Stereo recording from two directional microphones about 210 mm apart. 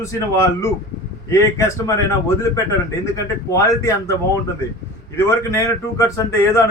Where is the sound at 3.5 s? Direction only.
15° left (ahead or behind).